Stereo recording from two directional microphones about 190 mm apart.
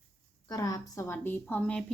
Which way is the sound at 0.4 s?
20° left (ahead or behind).